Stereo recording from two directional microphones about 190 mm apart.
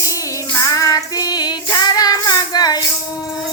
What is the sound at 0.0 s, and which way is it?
Child singing, 15° left (ahead or behind).